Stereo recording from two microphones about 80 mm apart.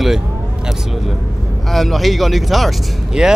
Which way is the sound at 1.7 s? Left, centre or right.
Centre.